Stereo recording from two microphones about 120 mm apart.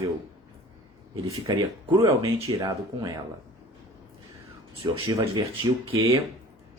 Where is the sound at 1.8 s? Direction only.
40° right (ahead or behind).